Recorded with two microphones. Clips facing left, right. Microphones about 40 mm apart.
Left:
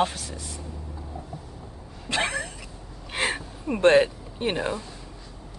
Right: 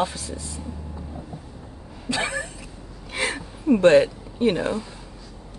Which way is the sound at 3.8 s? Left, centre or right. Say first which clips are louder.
Right 1 dB; left.